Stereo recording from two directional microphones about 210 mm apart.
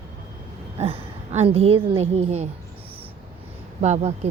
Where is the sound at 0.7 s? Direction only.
30° right (ahead or behind).